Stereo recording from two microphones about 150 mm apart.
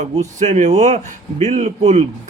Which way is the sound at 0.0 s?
50° right (ahead or behind).